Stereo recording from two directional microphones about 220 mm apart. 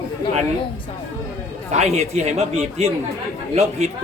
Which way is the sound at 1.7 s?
30° right (ahead or behind).